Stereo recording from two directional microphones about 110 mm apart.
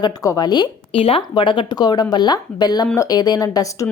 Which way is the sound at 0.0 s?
35° left (ahead or behind).